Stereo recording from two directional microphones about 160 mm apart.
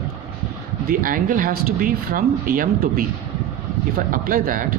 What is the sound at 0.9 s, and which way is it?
Speech, 60° right (ahead or behind).